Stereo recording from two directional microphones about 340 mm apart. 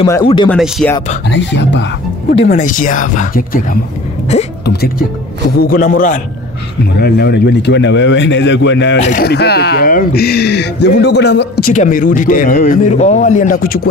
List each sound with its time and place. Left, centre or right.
0.0 s speech: centre
0.6 s speech: centre
1.3 s speech: left